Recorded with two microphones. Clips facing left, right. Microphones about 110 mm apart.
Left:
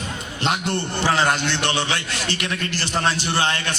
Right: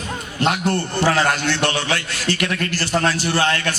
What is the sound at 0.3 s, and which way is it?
A man's voice, 25° left (ahead or behind).